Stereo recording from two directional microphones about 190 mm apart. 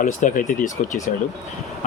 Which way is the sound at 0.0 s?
45° left (ahead or behind).